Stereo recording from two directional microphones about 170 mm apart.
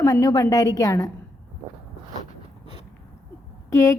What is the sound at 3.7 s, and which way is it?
Speech, 15° left (ahead or behind).